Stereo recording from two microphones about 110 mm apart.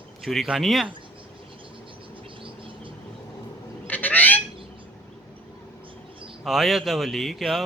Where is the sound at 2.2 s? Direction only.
50° right (ahead or behind).